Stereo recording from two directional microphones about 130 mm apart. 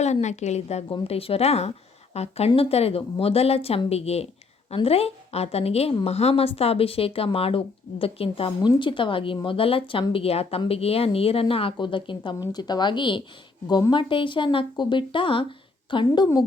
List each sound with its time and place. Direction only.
0.0 s a woman's voice: 60° left (ahead or behind)
0.9 s speech: 45° left (ahead or behind)